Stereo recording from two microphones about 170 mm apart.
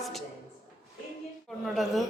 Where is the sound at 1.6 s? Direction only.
Centre (ahead or behind).